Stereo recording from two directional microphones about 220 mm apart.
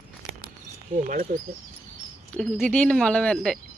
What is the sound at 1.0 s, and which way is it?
Speech, 35° right (ahead or behind).